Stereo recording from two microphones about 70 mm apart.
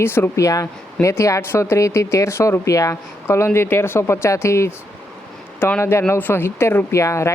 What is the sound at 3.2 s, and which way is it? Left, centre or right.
Speech, left.